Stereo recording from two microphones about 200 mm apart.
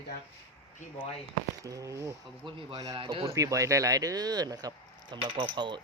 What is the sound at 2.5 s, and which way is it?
Speech, 25° right (ahead or behind).